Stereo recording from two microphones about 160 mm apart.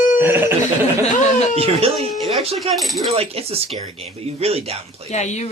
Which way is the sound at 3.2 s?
40° right (ahead or behind).